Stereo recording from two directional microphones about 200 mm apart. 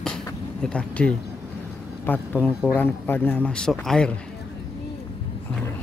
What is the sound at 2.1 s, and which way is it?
Speech, 10° left (ahead or behind).